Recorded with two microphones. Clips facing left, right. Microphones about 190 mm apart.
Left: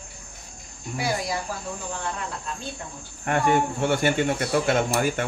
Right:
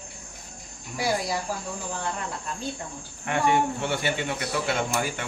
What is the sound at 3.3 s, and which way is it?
Speech, 45° left (ahead or behind).